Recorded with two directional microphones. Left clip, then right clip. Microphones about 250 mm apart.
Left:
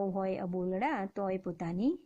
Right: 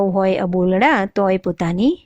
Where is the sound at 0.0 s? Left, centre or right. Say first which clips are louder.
Right 17 dB; right.